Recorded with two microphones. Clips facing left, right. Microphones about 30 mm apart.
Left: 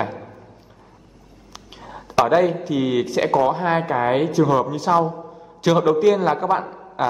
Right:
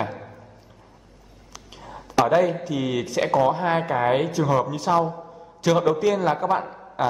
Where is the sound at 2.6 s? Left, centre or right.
Centre.